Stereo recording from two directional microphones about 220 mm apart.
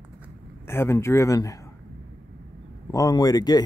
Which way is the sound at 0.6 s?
10° left (ahead or behind).